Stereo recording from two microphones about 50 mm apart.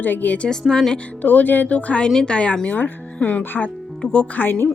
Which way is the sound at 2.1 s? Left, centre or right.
Centre.